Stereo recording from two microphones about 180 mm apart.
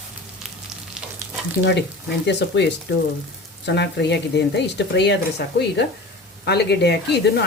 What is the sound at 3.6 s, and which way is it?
Speech, 70° left (ahead or behind).